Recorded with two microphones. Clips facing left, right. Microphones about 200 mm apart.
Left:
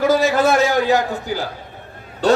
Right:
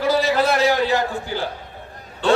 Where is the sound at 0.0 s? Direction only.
45° left (ahead or behind).